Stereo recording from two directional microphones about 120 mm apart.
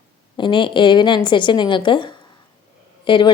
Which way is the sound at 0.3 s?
40° left (ahead or behind).